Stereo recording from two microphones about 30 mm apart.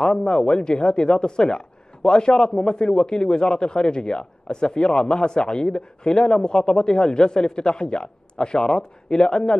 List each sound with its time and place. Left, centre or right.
0.0 s a man's voice: left